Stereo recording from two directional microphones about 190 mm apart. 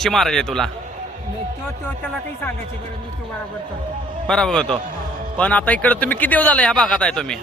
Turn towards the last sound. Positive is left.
turn(degrees=5)  # may be behind; listen again after turning